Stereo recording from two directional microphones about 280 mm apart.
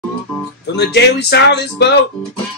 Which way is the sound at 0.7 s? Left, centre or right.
Left.